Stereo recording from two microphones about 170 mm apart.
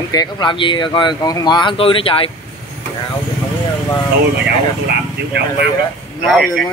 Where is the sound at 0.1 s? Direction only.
25° left (ahead or behind).